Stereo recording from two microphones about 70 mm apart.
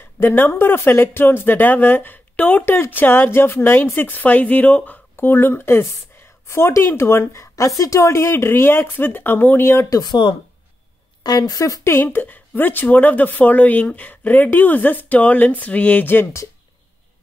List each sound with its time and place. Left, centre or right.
0.2 s a woman's voice: left
5.1 s speech: left
9.8 s speech: left
11.2 s speech: left
11.8 s a woman's voice: left